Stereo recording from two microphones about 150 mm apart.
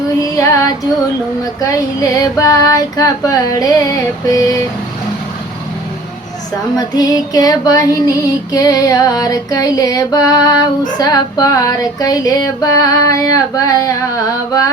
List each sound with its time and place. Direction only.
0.2 s female singing: 20° left (ahead or behind)
6.7 s female singing: 25° left (ahead or behind)